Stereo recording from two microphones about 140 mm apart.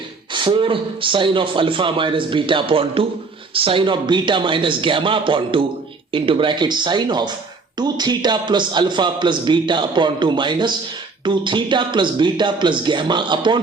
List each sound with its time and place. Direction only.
0.3 s a man's voice: 35° right (ahead or behind)